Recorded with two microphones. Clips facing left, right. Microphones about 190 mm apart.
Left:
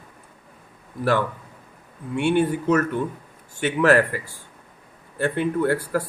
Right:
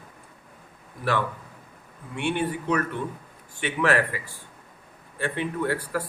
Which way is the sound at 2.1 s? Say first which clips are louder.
Left 7 dB; 45° left (ahead or behind).